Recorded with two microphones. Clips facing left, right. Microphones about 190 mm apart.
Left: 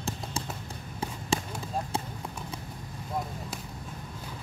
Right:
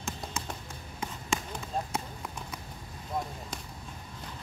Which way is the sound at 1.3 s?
30° left (ahead or behind).